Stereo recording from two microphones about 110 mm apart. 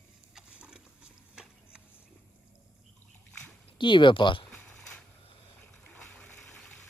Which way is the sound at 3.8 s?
45° left (ahead or behind).